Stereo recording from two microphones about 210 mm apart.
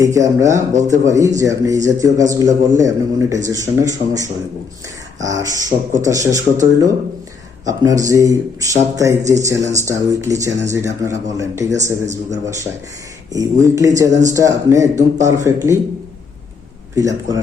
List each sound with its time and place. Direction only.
0.0 s a man's voice: 15° right (ahead or behind)
13.3 s a man's voice: 15° right (ahead or behind)
16.9 s a man's voice: 15° right (ahead or behind)